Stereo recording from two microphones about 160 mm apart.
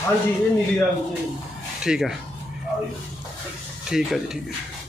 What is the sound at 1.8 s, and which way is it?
Speech, 5° right (ahead or behind).